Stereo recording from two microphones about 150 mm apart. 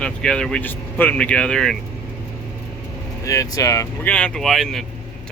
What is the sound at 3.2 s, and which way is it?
Speech, 20° left (ahead or behind).